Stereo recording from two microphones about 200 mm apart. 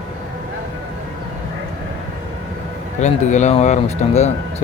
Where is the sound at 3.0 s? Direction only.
35° left (ahead or behind).